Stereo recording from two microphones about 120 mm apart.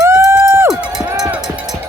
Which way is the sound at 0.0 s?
20° right (ahead or behind).